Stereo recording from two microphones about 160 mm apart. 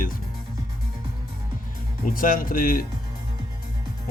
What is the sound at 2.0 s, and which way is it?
Speech, 60° left (ahead or behind).